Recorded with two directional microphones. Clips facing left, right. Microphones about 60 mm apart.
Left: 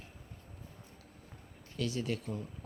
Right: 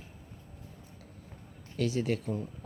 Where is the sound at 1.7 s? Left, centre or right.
Right.